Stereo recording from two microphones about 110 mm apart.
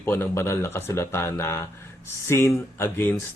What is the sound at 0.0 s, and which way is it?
A man's voice, 20° left (ahead or behind).